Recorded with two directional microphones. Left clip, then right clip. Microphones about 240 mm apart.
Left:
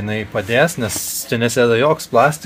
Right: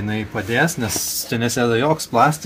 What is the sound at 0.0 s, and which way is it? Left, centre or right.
Speech, left.